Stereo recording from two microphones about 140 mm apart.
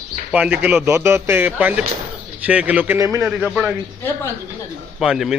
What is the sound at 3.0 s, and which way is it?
Speech, 20° right (ahead or behind).